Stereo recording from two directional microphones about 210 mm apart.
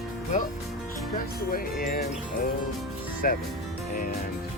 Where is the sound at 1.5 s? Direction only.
45° left (ahead or behind).